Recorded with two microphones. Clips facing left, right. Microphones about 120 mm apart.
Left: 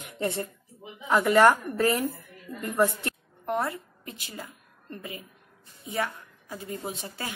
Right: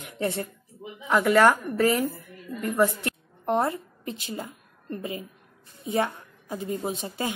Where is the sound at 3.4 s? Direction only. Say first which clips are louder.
Right 4 dB; 25° right (ahead or behind).